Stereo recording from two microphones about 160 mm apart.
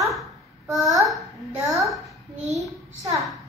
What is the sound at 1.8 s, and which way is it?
Speech, centre (ahead or behind).